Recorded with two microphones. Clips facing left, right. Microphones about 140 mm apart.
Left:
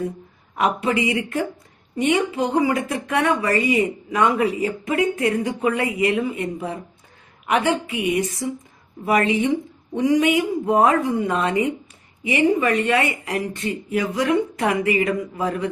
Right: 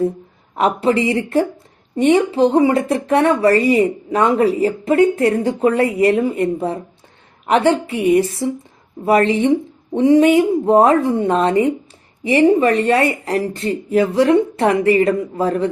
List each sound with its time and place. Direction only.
0.5 s a woman's voice: 30° right (ahead or behind)